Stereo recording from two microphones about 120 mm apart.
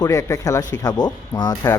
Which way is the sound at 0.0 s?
25° left (ahead or behind).